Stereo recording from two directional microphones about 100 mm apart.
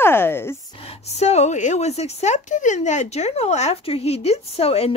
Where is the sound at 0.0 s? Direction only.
25° left (ahead or behind).